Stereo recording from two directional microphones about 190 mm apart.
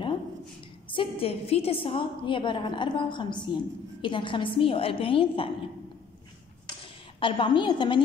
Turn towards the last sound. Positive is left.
turn(degrees=25)  # may be behind; listen again after turning